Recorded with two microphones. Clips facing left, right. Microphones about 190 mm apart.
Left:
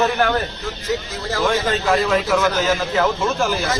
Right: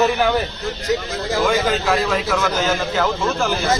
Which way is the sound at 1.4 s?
5° right (ahead or behind).